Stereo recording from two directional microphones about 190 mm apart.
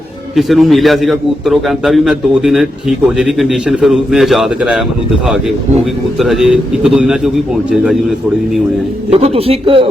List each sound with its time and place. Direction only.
0.3 s a man's voice: centre (ahead or behind)
6.1 s a man's voice: centre (ahead or behind)
9.0 s a man's voice: 30° right (ahead or behind)